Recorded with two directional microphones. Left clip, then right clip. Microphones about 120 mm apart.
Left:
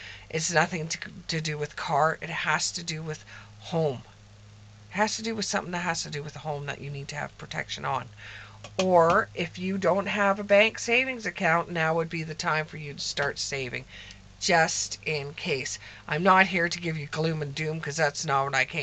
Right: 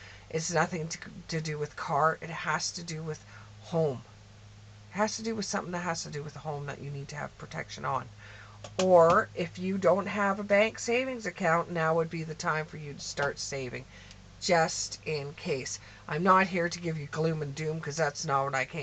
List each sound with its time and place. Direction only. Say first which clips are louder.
0.3 s speech: left 4 dB; 35° left (ahead or behind)
8.6 s speech: left 1 dB; 10° left (ahead or behind)
9.1 s speech: left 2 dB; 35° left (ahead or behind)